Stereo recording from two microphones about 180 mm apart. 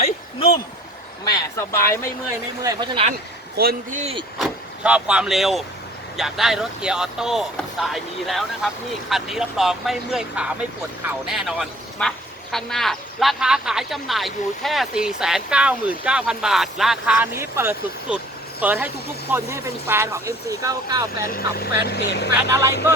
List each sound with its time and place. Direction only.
1.3 s vehicle: 15° left (ahead or behind)
2.6 s speech: 25° right (ahead or behind)
3.6 s a man's voice: 55° right (ahead or behind)
4.4 s speech: 5° right (ahead or behind)
17.3 s speech: 15° right (ahead or behind)
21.2 s speech: 55° left (ahead or behind)